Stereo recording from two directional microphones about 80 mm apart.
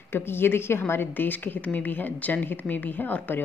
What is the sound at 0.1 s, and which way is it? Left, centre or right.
A woman's voice, left.